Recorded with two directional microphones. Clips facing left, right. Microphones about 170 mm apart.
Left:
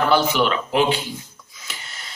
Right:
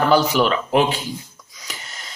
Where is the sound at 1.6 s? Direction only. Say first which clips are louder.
Right 2 dB; 40° right (ahead or behind).